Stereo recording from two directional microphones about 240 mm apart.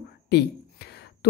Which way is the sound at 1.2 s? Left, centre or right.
Left.